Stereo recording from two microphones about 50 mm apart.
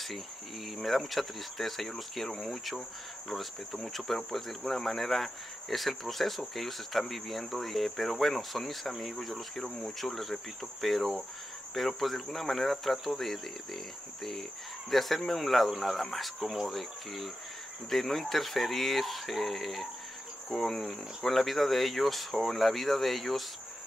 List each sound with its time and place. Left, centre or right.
0.7 s speech: centre
14.9 s speech: centre